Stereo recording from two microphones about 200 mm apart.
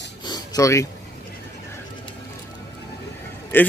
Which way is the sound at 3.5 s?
10° left (ahead or behind).